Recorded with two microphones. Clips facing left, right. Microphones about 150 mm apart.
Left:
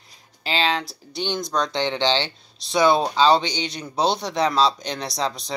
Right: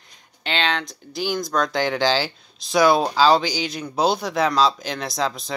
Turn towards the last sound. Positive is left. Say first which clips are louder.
# right 1 dB
turn(degrees=0)  # may be behind; listen again after turning